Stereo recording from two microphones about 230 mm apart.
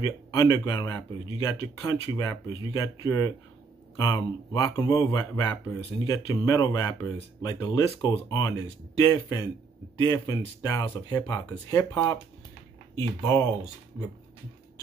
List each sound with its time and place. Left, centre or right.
0.0 s speech: centre